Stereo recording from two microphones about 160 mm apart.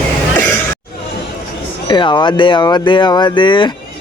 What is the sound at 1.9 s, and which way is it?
Speech, 30° left (ahead or behind).